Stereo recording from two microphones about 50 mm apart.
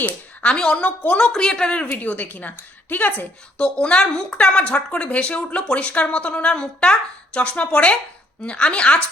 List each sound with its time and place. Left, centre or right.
0.0 s speech: left
1.2 s speech: centre
1.9 s a woman's voice: left
3.6 s speech: left